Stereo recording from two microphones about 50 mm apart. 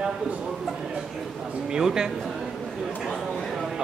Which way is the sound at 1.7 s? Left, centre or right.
Centre.